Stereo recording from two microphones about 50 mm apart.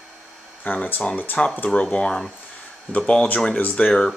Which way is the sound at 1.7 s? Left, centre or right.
Centre.